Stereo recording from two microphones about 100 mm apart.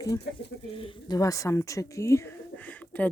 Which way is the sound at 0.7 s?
60° left (ahead or behind).